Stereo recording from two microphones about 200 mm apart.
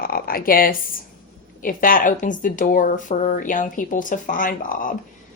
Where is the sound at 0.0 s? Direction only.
45° left (ahead or behind).